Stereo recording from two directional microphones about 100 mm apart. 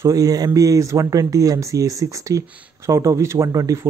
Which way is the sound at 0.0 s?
35° right (ahead or behind).